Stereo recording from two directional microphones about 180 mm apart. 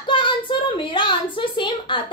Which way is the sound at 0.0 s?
25° left (ahead or behind).